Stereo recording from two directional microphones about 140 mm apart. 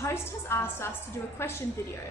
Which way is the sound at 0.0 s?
20° left (ahead or behind).